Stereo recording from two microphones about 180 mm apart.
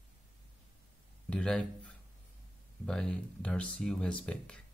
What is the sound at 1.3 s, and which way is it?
Speech, 5° left (ahead or behind).